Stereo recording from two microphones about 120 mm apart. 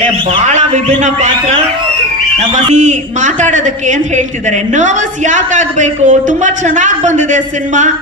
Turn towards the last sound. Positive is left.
turn(degrees=-90)